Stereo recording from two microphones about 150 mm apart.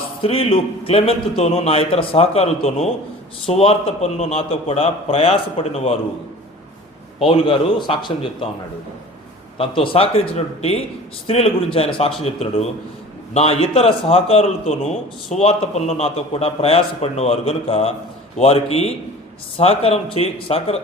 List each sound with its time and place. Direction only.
0.2 s a man's voice: 40° left (ahead or behind)
7.2 s a man's voice: 35° left (ahead or behind)
9.6 s a man's voice: 35° left (ahead or behind)